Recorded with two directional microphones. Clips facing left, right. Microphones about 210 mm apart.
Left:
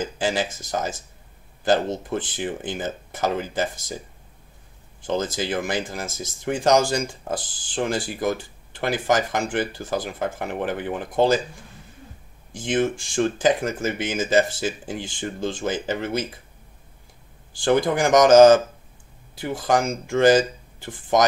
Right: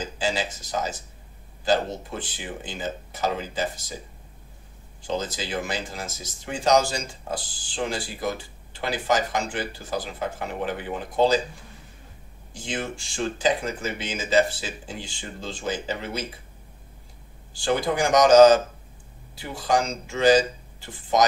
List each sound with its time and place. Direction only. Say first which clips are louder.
0.2 s speech: left 2 dB; 50° left (ahead or behind)
5.0 s speech: left 4 dB; 50° left (ahead or behind)
13.1 s speech: left 2 dB; 50° left (ahead or behind)
17.6 s speech: left 4 dB; 55° left (ahead or behind)